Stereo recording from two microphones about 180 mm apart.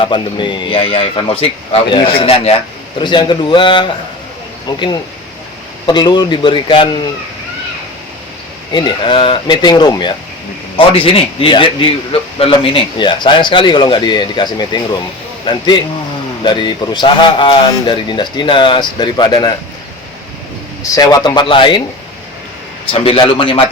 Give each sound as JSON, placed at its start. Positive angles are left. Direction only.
{"t": 0.0, "sound": "speech", "side_deg": 25}
{"t": 5.8, "sound": "speech", "side_deg": 25}
{"t": 8.7, "sound": "speech", "side_deg": 25}
{"t": 20.9, "sound": "speech", "side_deg": 20}
{"t": 22.9, "sound": "speech", "side_deg": 30}